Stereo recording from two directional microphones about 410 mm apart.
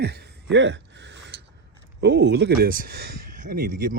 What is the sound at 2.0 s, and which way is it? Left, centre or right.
Speech, right.